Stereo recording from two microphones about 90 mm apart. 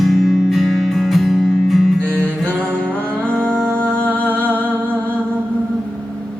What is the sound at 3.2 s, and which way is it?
Music, 20° right (ahead or behind).